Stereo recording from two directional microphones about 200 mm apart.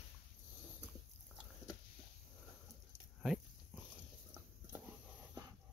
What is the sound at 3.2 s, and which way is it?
Dog, centre (ahead or behind).